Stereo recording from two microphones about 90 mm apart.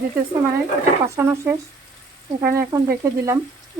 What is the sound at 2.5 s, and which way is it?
Frying, 35° right (ahead or behind).